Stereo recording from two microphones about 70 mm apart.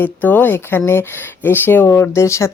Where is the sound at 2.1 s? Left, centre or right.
Left.